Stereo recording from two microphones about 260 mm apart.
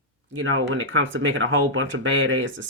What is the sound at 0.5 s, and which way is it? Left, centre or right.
Speech, right.